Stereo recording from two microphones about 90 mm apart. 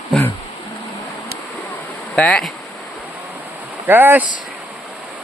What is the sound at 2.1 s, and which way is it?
Bee, 10° left (ahead or behind).